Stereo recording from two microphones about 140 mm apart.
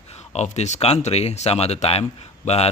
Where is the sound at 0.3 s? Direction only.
55° left (ahead or behind).